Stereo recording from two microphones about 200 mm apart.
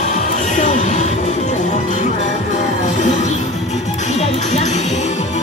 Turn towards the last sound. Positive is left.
turn(degrees=35)  # may be behind; listen again after turning